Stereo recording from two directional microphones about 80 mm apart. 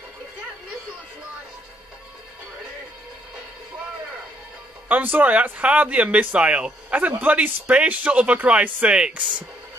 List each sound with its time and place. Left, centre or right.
4.8 s speech: right